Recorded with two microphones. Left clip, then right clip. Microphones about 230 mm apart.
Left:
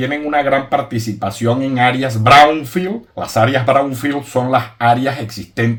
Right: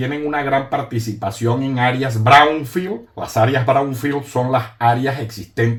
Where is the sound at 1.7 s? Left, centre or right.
Left.